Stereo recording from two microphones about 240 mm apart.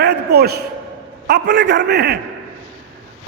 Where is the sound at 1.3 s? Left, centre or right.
Right.